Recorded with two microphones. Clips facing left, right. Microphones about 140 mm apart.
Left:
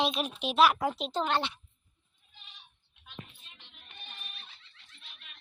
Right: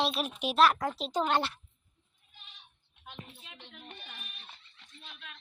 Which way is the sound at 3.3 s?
75° right (ahead or behind).